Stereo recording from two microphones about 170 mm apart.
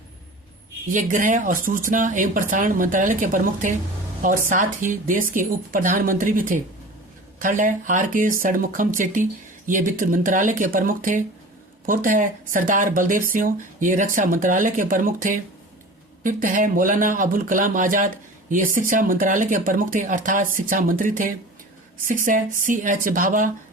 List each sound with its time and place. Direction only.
0.9 s speech: 50° right (ahead or behind)